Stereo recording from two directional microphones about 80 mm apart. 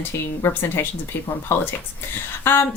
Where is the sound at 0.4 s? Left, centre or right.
Left.